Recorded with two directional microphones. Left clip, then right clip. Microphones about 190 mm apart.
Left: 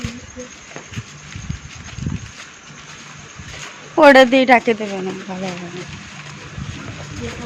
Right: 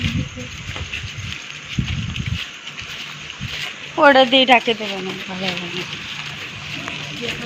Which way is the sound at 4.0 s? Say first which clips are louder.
Left 3 dB; 40° left (ahead or behind).